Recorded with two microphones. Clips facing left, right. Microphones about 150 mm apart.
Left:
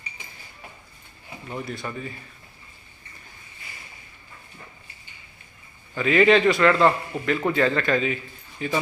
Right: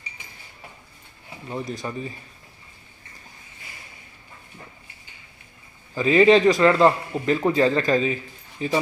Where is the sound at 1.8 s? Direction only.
25° right (ahead or behind).